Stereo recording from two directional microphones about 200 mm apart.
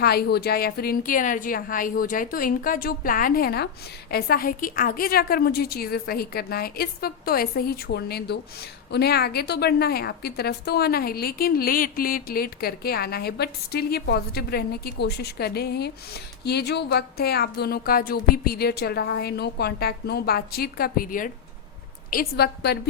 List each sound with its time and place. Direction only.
0.0 s a woman's voice: 50° left (ahead or behind)